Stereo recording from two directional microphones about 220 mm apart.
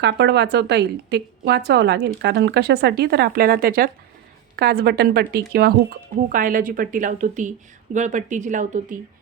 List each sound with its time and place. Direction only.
0.0 s a woman's voice: 50° right (ahead or behind); by 9.0 s 35° right (ahead or behind)